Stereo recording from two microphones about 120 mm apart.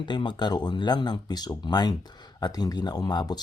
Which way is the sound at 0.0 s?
40° left (ahead or behind).